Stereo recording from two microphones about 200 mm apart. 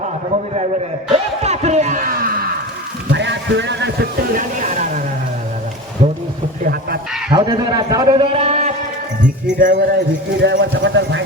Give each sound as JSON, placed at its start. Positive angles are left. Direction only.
{"t": 1.1, "sound": "speech", "side_deg": -30}
{"t": 3.1, "sound": "speech", "side_deg": -60}
{"t": 7.3, "sound": "a man's voice", "side_deg": -20}
{"t": 9.7, "sound": "a sound", "side_deg": -50}
{"t": 10.4, "sound": "speech", "side_deg": -60}